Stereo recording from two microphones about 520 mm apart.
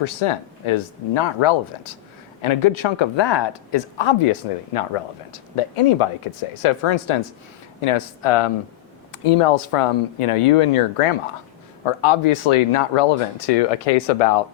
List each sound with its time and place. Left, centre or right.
0.0 s speech: left
6.6 s speech: left
11.9 s speech: left